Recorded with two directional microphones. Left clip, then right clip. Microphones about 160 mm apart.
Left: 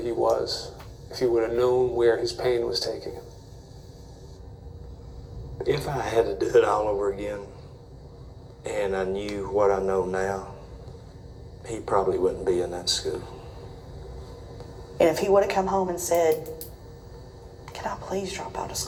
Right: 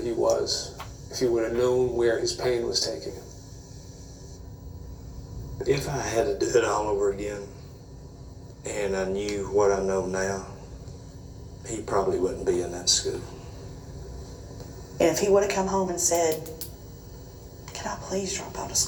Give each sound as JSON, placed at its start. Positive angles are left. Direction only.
{"t": 0.0, "sound": "speech", "side_deg": -15}
{"t": 5.6, "sound": "speech", "side_deg": -15}
{"t": 8.6, "sound": "speech", "side_deg": -15}
{"t": 11.6, "sound": "speech", "side_deg": -15}
{"t": 14.9, "sound": "speech", "side_deg": -15}
{"t": 17.7, "sound": "speech", "side_deg": -15}